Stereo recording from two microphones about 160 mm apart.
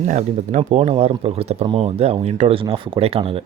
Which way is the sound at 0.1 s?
45° right (ahead or behind).